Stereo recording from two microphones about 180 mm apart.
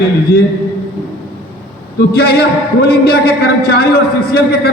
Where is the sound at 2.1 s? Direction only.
60° left (ahead or behind).